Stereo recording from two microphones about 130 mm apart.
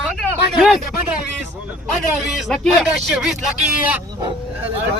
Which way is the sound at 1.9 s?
Centre (ahead or behind).